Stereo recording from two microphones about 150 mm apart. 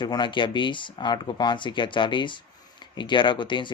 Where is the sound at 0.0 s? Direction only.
30° left (ahead or behind).